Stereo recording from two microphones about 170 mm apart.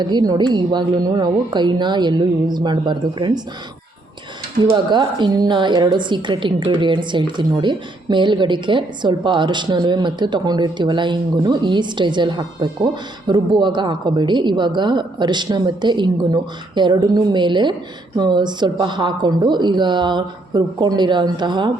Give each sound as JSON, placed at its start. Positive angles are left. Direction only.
{"t": 0.0, "sound": "a woman's voice", "side_deg": -25}
{"t": 4.6, "sound": "a woman's voice", "side_deg": -25}